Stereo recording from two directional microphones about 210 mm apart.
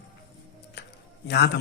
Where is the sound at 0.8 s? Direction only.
50° left (ahead or behind).